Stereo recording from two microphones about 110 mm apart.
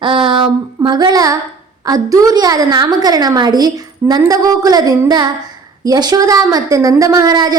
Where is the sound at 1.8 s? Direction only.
35° right (ahead or behind).